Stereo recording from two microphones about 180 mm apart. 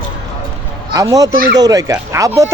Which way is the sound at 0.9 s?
20° right (ahead or behind).